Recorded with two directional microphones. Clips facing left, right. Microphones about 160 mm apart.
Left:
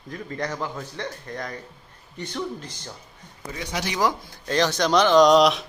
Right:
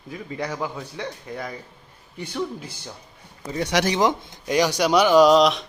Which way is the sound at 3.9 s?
15° right (ahead or behind).